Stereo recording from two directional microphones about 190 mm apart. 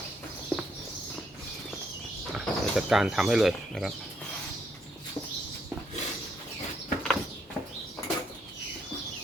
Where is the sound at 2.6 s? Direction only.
5° right (ahead or behind).